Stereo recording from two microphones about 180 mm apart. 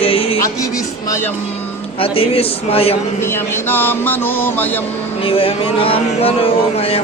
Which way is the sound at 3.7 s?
10° left (ahead or behind).